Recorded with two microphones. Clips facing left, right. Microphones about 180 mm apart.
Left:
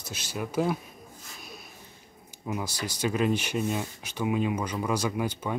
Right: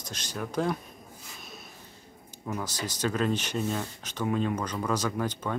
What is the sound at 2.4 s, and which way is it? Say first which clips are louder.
Speech: left 1 dB; 10° left (ahead or behind).